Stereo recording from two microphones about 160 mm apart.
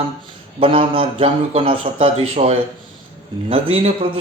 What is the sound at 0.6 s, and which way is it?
Speech, 35° right (ahead or behind).